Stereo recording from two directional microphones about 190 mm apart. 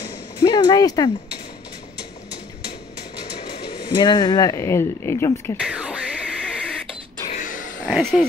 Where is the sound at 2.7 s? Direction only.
25° left (ahead or behind).